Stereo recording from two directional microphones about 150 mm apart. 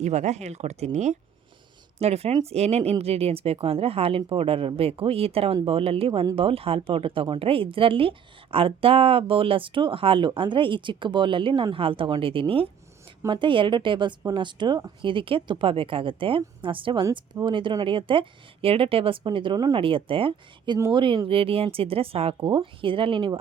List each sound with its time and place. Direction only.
0.0 s speech: 50° right (ahead or behind)
2.0 s speech: 45° right (ahead or behind)
20.7 s speech: 20° right (ahead or behind)
21.0 s speech: 35° right (ahead or behind)